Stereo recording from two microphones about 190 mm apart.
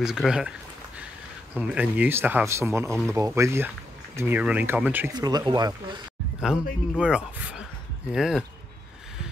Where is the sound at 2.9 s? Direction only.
5° left (ahead or behind).